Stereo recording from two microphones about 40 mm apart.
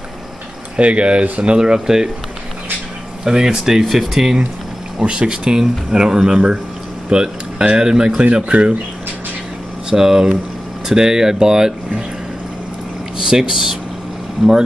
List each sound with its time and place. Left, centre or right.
0.7 s speech: right
1.4 s speech: right
3.3 s speech: centre
4.9 s speech: right
9.8 s speech: centre
13.3 s speech: centre